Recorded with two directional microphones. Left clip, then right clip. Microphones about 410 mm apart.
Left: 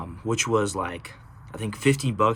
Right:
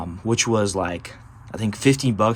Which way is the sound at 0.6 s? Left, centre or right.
Centre.